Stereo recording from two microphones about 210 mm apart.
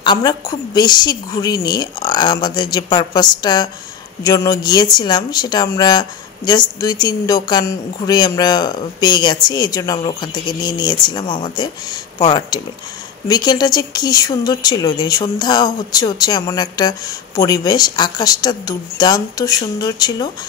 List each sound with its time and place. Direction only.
0.0 s speech: 20° left (ahead or behind)